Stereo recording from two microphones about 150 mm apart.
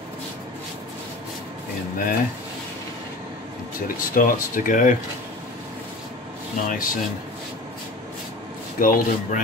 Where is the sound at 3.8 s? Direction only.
65° left (ahead or behind).